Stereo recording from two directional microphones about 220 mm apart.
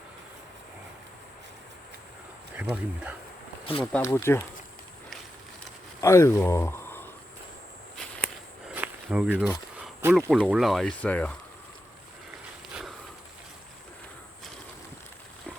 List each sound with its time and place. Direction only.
2.6 s speech: 5° right (ahead or behind)
3.9 s speech: 10° left (ahead or behind)
6.0 s speech: 15° left (ahead or behind)
8.7 s speech: 5° right (ahead or behind)